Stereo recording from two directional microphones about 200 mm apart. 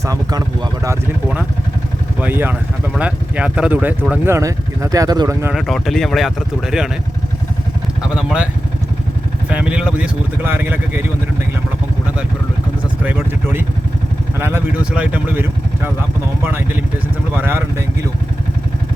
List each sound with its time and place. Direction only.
0.0 s speech: 20° right (ahead or behind)
2.2 s speech: 10° right (ahead or behind)
5.5 s speech: centre (ahead or behind)
8.1 s speech: 5° right (ahead or behind)
9.5 s speech: 5° right (ahead or behind)
13.1 s speech: 10° right (ahead or behind)